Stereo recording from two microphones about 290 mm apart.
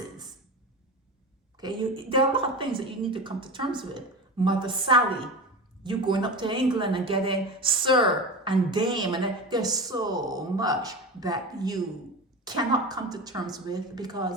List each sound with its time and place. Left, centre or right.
1.5 s a woman's voice: centre